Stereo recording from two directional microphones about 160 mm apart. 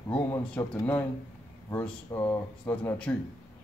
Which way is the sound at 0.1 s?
15° left (ahead or behind).